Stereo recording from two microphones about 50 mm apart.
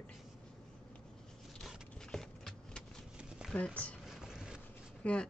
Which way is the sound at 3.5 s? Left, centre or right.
Left.